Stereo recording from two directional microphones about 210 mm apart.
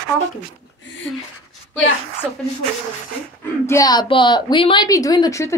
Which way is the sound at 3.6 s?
15° left (ahead or behind).